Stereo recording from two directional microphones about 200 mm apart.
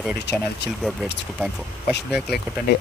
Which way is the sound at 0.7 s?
Centre (ahead or behind).